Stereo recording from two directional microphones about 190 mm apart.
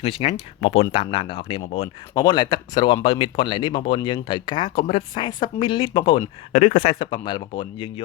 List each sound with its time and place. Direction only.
0.0 s speech: 30° left (ahead or behind)
7.0 s speech: 25° left (ahead or behind)